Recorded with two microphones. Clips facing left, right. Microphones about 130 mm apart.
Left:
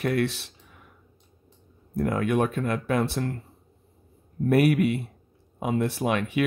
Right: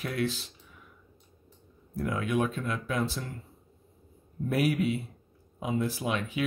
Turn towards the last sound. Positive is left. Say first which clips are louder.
# left 6 dB
turn(degrees=65)  # may be behind; listen again after turning